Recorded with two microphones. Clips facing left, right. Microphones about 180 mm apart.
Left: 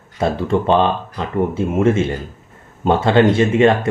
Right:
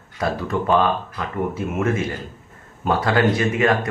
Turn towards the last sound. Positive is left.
turn(degrees=25)  # may be behind; listen again after turning